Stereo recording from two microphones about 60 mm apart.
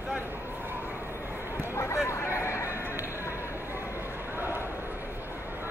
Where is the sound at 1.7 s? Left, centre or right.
Left.